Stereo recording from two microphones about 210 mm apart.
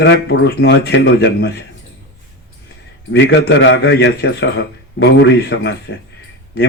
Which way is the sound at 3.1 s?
55° left (ahead or behind).